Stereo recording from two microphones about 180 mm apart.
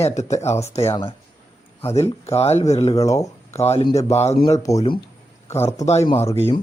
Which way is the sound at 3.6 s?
35° left (ahead or behind).